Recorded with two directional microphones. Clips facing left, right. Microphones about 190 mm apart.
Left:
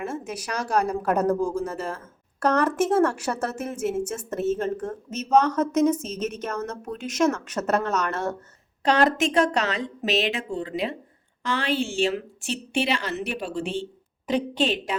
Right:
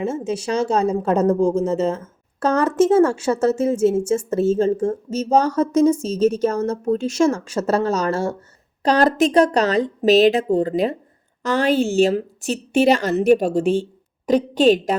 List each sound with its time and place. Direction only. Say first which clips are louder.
0.0 s a woman's voice: right 8 dB; 25° right (ahead or behind); by 14.9 s 40° right (ahead or behind)